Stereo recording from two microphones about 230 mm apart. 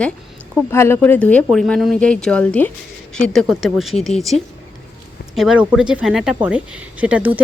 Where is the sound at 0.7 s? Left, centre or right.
Centre.